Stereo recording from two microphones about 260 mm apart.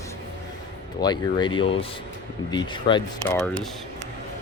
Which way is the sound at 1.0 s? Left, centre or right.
Centre.